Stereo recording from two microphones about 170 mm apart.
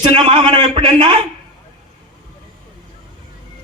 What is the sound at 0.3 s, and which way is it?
A man's voice, 30° right (ahead or behind).